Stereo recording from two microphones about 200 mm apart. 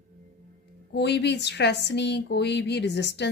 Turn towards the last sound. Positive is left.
turn(degrees=60)  # may be behind; listen again after turning